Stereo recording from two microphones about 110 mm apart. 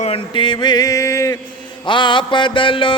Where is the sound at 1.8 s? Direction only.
50° left (ahead or behind).